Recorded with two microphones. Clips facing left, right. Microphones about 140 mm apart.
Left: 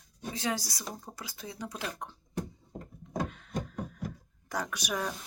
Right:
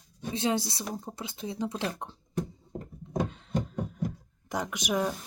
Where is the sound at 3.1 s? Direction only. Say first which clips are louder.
Right 4 dB; 25° right (ahead or behind).